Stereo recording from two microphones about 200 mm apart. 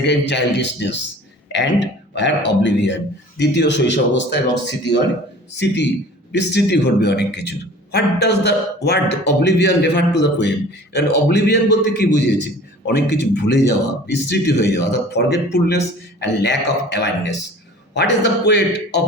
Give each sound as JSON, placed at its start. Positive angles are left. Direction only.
{"t": 0.0, "sound": "a man's voice", "side_deg": 60}